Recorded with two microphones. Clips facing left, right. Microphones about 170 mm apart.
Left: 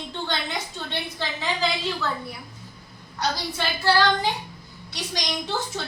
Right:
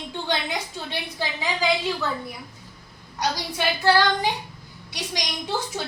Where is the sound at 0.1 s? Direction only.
10° right (ahead or behind).